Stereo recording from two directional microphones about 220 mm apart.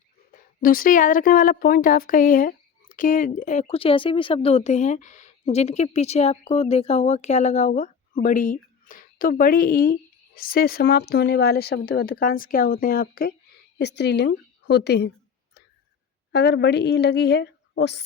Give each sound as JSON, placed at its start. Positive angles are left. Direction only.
{"t": 0.3, "sound": "a woman's voice", "side_deg": 40}
{"t": 16.3, "sound": "speech", "side_deg": 50}